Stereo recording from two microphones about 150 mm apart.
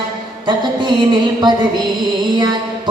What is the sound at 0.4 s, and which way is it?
Music, 30° right (ahead or behind).